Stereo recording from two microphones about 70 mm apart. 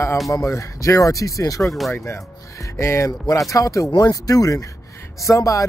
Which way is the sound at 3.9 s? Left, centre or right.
Left.